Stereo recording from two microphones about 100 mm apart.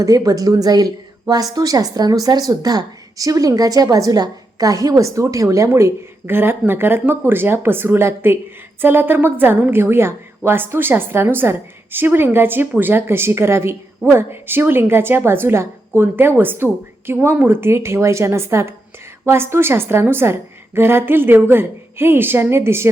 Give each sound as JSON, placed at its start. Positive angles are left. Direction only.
{"t": 0.0, "sound": "a woman's voice", "side_deg": -35}